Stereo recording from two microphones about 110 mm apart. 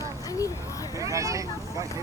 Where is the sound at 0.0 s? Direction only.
30° left (ahead or behind).